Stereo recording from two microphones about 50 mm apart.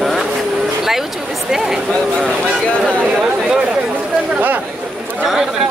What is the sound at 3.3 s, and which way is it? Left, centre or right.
Speech, centre.